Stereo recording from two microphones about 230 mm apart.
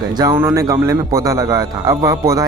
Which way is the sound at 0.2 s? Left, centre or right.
Centre.